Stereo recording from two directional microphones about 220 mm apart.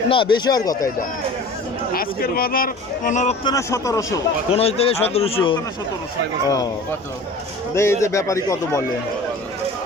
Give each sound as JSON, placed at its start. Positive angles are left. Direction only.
{"t": 0.1, "sound": "a man's voice", "side_deg": 20}
{"t": 1.9, "sound": "speech", "side_deg": 45}
{"t": 3.4, "sound": "speech", "side_deg": 15}
{"t": 4.5, "sound": "a man's voice", "side_deg": 25}
{"t": 7.8, "sound": "speech", "side_deg": 10}